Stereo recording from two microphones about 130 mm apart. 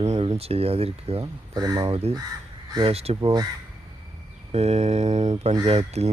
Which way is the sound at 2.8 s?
50° right (ahead or behind).